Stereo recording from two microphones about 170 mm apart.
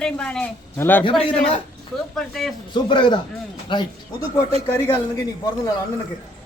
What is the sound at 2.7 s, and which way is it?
A man's voice, 25° left (ahead or behind).